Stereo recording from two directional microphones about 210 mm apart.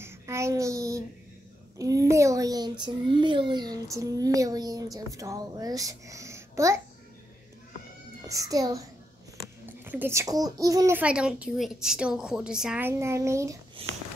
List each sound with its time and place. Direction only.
0.0 s child singing: 15° right (ahead or behind)
1.8 s a child's voice: 15° right (ahead or behind)
8.3 s a child's voice: 15° right (ahead or behind)
13.8 s speech: 25° right (ahead or behind)